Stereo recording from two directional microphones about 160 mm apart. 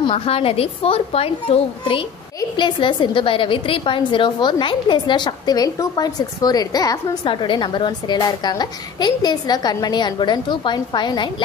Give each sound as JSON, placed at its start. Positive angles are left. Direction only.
{"t": 0.0, "sound": "a woman's voice", "side_deg": 35}
{"t": 2.5, "sound": "a woman's voice", "side_deg": 30}